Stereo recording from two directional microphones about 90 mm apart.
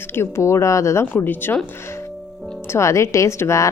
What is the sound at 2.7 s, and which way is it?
Speech, 30° left (ahead or behind).